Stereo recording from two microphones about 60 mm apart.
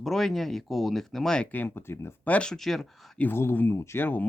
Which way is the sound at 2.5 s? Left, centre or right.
Centre.